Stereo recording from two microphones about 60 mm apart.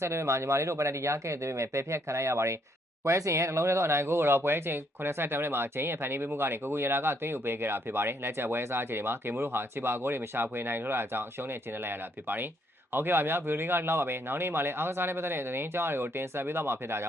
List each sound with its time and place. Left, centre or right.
0.0 s speech: right